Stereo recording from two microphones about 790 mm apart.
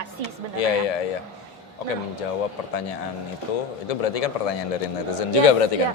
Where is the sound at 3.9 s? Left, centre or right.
Left.